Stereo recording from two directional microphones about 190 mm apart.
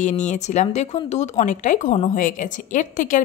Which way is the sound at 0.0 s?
40° left (ahead or behind).